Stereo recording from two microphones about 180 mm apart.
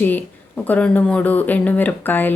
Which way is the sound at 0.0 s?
10° left (ahead or behind).